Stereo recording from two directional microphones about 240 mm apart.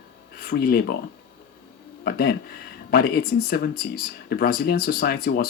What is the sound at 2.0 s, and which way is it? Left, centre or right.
Speech, left.